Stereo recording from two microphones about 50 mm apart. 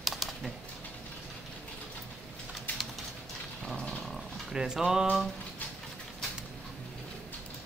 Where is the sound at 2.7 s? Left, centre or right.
Left.